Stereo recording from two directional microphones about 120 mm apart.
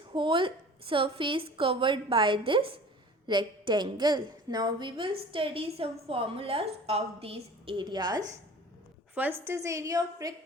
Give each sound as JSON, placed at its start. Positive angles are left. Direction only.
{"t": 0.1, "sound": "a woman's voice", "side_deg": -45}
{"t": 9.4, "sound": "a woman's voice", "side_deg": -20}